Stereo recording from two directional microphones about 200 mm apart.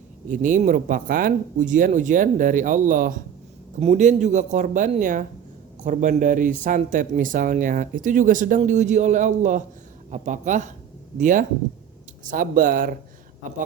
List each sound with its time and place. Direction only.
0.3 s speech: 40° right (ahead or behind)